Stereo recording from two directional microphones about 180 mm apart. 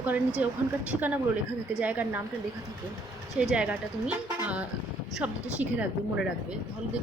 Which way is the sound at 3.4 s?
5° right (ahead or behind).